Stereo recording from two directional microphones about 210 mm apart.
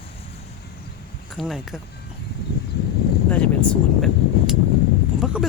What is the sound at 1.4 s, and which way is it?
Speech, centre (ahead or behind).